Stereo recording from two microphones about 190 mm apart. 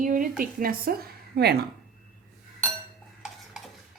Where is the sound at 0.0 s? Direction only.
45° right (ahead or behind).